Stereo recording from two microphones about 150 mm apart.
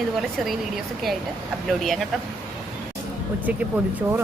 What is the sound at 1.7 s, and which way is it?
Speech, centre (ahead or behind).